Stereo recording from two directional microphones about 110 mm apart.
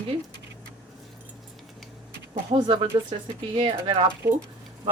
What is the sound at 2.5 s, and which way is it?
Speech, 55° right (ahead or behind).